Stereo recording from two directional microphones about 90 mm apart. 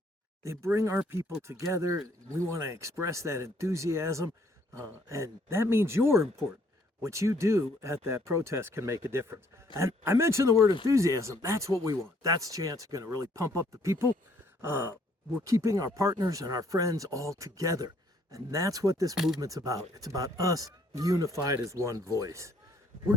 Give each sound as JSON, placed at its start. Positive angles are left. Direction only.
{"t": 0.4, "sound": "speech", "side_deg": -30}
{"t": 14.6, "sound": "groan", "side_deg": -25}
{"t": 15.4, "sound": "speech", "side_deg": -35}
{"t": 19.1, "sound": "speech", "side_deg": -5}
{"t": 19.4, "sound": "speech", "side_deg": -40}